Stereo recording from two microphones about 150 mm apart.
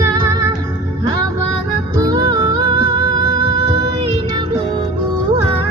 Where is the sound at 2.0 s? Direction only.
25° right (ahead or behind).